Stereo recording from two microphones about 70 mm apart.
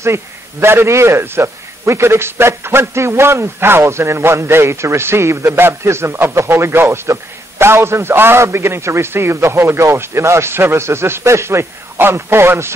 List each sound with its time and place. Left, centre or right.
0.0 s a man's voice: right